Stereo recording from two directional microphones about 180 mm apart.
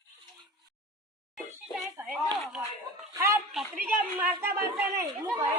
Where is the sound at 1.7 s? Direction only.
10° right (ahead or behind).